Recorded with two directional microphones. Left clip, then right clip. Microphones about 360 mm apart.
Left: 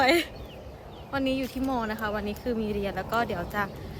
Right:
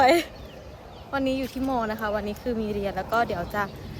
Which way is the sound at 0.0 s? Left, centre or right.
Centre.